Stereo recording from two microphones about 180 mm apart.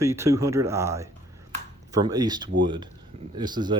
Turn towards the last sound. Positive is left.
turn(degrees=-25)  # may be behind; listen again after turning